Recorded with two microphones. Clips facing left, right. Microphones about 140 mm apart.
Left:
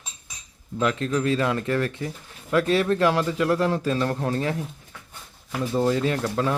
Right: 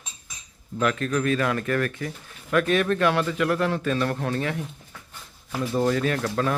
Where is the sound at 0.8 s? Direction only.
20° left (ahead or behind).